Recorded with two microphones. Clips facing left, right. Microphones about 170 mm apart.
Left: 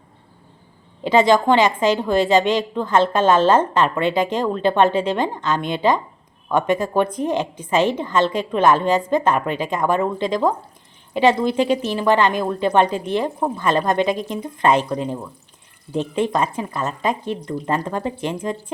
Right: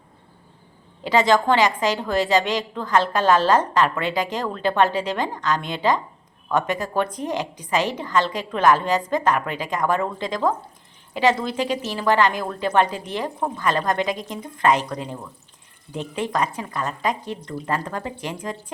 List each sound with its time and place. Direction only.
1.0 s a woman's voice: 20° left (ahead or behind)